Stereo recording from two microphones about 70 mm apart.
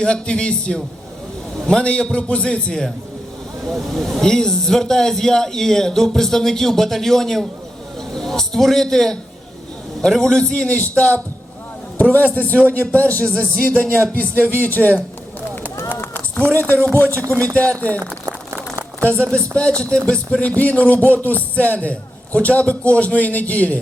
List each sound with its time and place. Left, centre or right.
0.0 s a man's voice: centre
17.0 s a man's voice: left
18.3 s crumpling: right
19.0 s a man's voice: centre